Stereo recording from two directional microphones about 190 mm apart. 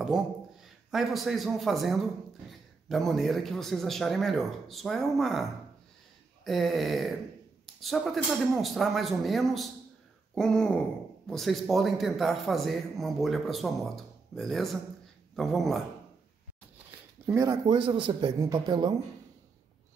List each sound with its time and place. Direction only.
0.0 s a man's voice: centre (ahead or behind)
17.3 s speech: 15° right (ahead or behind)